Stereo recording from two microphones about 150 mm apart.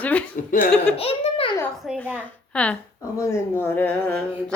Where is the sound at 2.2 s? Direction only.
10° left (ahead or behind).